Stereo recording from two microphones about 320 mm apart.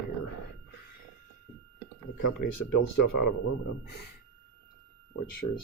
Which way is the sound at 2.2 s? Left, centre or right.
Left.